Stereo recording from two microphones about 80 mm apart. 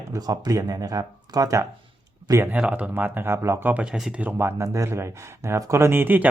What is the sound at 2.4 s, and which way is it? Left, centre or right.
Speech, centre.